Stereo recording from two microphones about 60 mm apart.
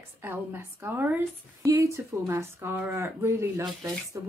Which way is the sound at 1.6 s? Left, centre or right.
Right.